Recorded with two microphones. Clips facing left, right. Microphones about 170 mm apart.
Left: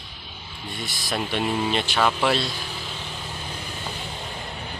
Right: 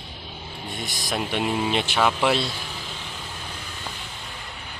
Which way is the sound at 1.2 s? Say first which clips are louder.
Even; 10° right (ahead or behind).